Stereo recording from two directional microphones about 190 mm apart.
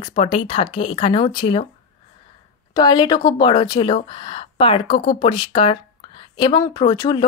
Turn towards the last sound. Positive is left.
turn(degrees=20)  # may be behind; listen again after turning